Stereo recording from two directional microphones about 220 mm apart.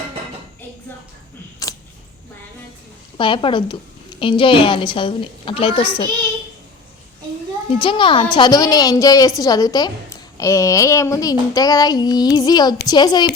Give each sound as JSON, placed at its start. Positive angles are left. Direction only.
{"t": 1.7, "sound": "a sound", "side_deg": 15}
{"t": 3.2, "sound": "a woman's voice", "side_deg": 20}
{"t": 7.8, "sound": "a woman's voice", "side_deg": 20}